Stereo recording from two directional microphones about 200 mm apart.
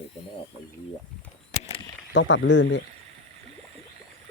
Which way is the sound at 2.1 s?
65° left (ahead or behind).